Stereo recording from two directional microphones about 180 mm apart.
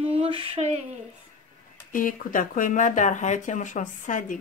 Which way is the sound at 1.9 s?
50° left (ahead or behind).